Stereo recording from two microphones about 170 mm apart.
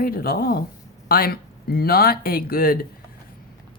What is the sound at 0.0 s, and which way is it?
Speech, 60° left (ahead or behind).